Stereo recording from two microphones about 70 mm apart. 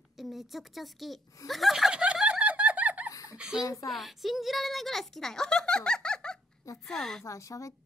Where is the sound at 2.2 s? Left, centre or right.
Centre.